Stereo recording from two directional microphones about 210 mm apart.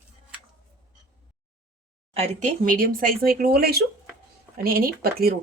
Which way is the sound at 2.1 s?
30° right (ahead or behind).